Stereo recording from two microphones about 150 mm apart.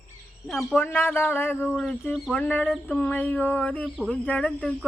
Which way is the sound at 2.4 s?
15° left (ahead or behind).